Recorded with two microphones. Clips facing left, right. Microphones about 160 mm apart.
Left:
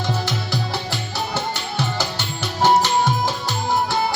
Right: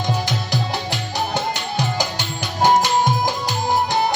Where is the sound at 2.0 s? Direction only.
15° right (ahead or behind).